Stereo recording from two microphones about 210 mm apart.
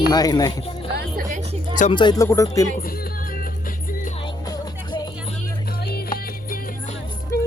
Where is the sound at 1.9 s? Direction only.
20° left (ahead or behind).